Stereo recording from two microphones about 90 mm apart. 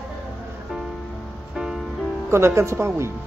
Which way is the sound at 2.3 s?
30° right (ahead or behind).